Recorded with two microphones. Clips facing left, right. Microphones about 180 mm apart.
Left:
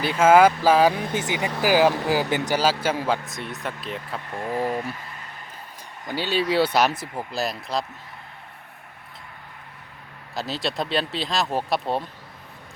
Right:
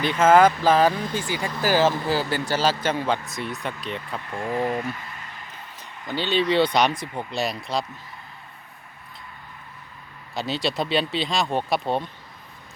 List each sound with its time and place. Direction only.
0.0 s speech: 5° left (ahead or behind)
6.1 s speech: 10° left (ahead or behind)
10.3 s speech: centre (ahead or behind)